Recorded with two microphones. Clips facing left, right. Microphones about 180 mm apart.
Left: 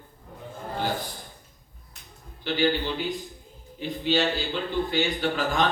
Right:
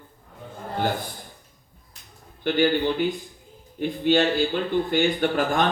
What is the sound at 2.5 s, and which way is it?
Speech, 50° right (ahead or behind).